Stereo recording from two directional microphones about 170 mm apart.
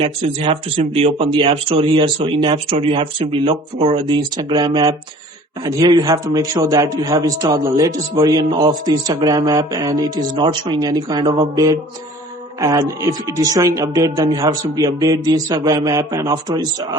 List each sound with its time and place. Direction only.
0.0 s speech: 35° right (ahead or behind)